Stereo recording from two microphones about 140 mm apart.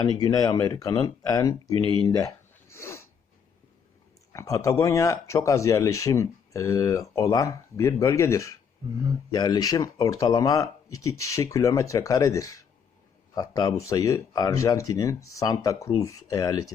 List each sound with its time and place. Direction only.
0.0 s speech: 30° left (ahead or behind)
1.8 s speech: 35° right (ahead or behind)
2.0 s a sound: 25° left (ahead or behind)
4.3 s speech: 25° left (ahead or behind)